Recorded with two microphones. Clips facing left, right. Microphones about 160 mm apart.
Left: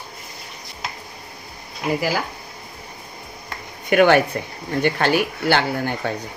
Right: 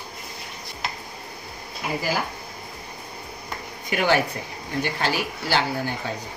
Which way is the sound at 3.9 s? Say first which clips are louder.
Left 7 dB; 60° left (ahead or behind).